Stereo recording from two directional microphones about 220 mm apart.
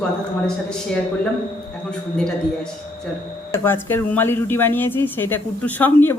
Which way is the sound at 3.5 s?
10° left (ahead or behind).